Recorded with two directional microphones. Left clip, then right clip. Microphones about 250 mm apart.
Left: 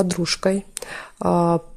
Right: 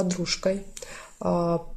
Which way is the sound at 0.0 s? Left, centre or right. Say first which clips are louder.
Left 5 dB; left.